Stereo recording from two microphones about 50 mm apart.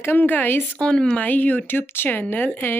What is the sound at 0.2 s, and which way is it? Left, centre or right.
Speech, left.